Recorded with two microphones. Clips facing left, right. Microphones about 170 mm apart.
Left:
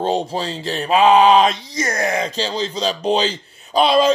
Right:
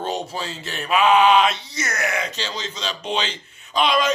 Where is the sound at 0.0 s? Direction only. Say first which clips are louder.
Left 6 dB; 30° left (ahead or behind).